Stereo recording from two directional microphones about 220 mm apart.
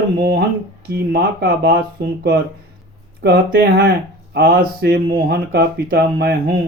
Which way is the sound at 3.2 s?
45° right (ahead or behind).